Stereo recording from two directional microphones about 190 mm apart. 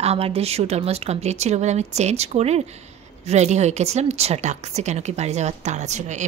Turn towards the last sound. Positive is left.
turn(degrees=-40)  # may be behind; listen again after turning